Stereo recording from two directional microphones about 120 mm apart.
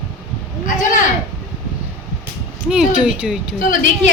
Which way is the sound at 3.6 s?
90° left.